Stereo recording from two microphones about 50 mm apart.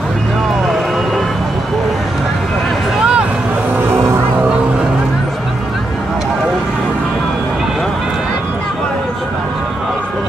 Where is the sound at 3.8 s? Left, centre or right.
Right.